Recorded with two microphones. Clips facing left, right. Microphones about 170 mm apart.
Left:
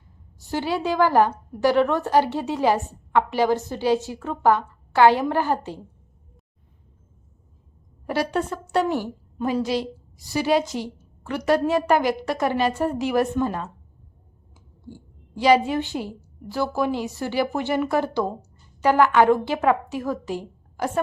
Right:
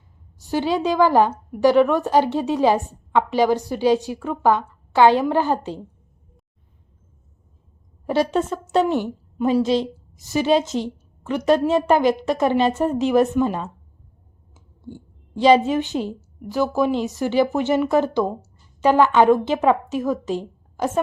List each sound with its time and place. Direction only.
0.5 s a woman's voice: 20° right (ahead or behind)
8.0 s a woman's voice: 25° right (ahead or behind)
14.8 s a woman's voice: 25° right (ahead or behind)